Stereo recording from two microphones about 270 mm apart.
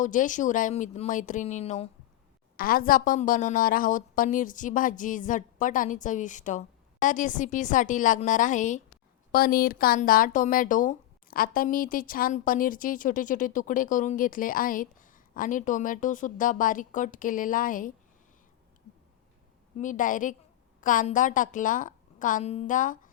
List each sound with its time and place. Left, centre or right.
0.0 s speech: left
19.8 s speech: left